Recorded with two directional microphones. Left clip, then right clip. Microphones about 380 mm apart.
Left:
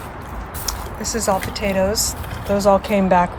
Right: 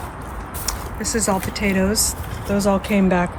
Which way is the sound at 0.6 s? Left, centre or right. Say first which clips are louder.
Even; centre.